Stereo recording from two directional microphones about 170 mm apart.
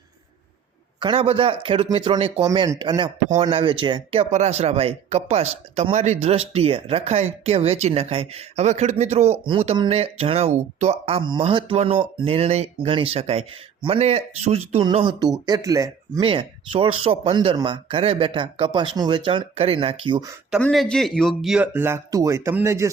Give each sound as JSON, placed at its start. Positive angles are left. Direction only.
{"t": 0.9, "sound": "speech", "side_deg": -30}
{"t": 2.5, "sound": "speech", "side_deg": -20}
{"t": 14.8, "sound": "speech", "side_deg": -25}
{"t": 16.2, "sound": "speech", "side_deg": -30}
{"t": 20.6, "sound": "speech", "side_deg": 5}